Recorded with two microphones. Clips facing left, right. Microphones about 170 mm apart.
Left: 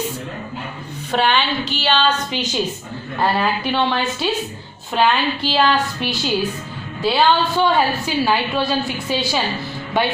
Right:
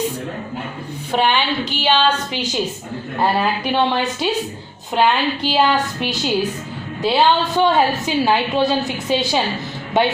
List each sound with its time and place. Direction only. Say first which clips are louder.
1.1 s a woman's voice: even; 15° right (ahead or behind)